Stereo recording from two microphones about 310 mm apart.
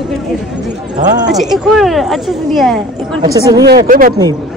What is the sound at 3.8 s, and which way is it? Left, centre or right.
Speech, right.